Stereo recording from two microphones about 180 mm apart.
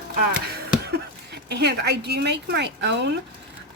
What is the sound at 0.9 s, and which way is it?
Speech, 65° right (ahead or behind).